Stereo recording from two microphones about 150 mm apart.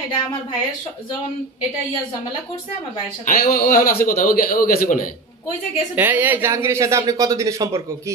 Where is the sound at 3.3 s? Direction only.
60° left (ahead or behind).